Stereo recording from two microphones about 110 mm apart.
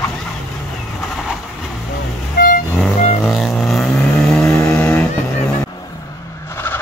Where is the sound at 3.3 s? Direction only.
Centre (ahead or behind).